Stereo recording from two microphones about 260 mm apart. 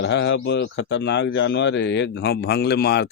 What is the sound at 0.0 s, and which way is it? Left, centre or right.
Speech, left.